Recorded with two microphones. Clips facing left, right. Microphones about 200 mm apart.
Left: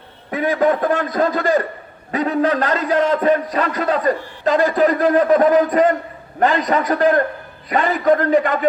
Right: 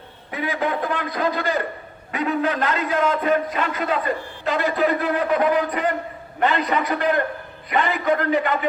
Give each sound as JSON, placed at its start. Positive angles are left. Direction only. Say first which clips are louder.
{"t": 0.3, "sound": "a man's voice", "louder": "left 8 dB", "side_deg": 45}